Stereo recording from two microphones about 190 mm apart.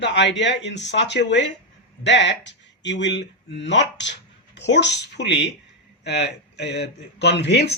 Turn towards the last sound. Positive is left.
turn(degrees=60)  # may be behind; listen again after turning